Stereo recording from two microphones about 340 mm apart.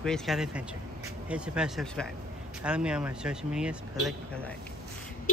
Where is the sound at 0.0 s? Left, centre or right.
Centre.